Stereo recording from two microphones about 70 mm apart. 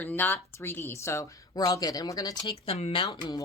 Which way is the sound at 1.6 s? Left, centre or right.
Left.